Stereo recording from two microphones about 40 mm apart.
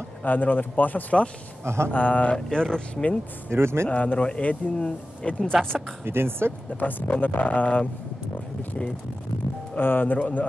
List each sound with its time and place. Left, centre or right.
0.2 s speech: left
1.6 s speech: right
1.9 s speech: left
2.3 s speech: centre
3.4 s speech: right
3.8 s speech: left
5.5 s speech: centre
6.0 s speech: right
6.8 s speech: left
9.8 s speech: left